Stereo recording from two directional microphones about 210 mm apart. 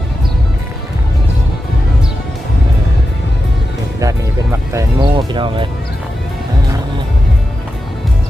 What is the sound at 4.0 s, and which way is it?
Music, 15° right (ahead or behind).